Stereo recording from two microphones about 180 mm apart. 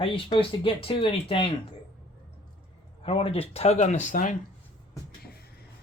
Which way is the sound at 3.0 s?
30° left (ahead or behind).